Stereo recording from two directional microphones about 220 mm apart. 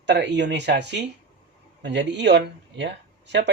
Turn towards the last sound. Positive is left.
turn(degrees=-50)  # may be behind; listen again after turning